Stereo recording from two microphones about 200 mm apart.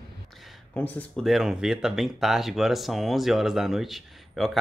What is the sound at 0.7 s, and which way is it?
Speech, 5° left (ahead or behind).